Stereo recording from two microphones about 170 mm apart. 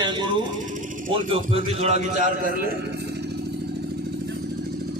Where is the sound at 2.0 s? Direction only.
55° right (ahead or behind).